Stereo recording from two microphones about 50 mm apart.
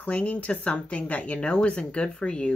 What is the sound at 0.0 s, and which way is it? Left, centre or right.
Speech, left.